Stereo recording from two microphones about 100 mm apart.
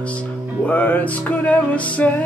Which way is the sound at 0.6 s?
15° left (ahead or behind).